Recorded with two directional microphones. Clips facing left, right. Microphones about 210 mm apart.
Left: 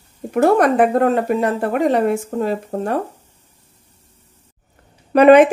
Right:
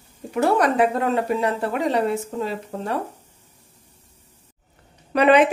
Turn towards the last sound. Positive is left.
turn(degrees=50)  # may be behind; listen again after turning